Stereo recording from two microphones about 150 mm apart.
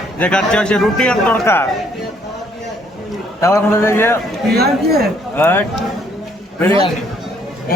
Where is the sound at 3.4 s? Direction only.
20° left (ahead or behind).